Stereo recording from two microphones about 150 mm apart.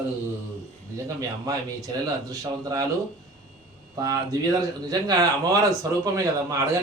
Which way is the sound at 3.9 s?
25° right (ahead or behind).